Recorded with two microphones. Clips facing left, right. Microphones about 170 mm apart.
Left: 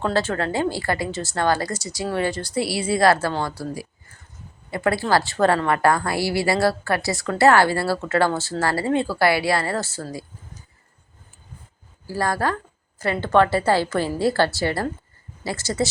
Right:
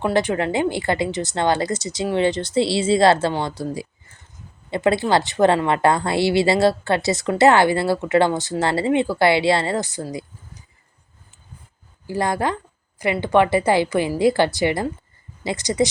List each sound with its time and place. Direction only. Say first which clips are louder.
0.0 s a woman's voice: right 3 dB; 15° right (ahead or behind)
12.0 s a woman's voice: right 1 dB; 20° right (ahead or behind)